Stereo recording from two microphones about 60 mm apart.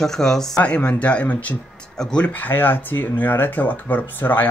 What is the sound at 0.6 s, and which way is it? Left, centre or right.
Speech, left.